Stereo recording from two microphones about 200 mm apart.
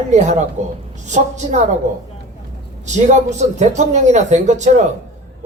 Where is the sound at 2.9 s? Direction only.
35° right (ahead or behind).